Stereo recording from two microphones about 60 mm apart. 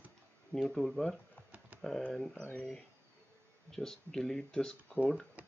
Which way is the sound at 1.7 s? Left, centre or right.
Right.